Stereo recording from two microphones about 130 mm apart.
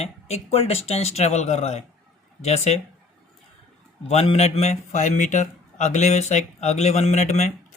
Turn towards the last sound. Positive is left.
turn(degrees=60)  # may be behind; listen again after turning